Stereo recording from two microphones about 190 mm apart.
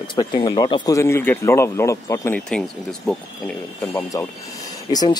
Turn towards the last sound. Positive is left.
turn(degrees=20)  # may be behind; listen again after turning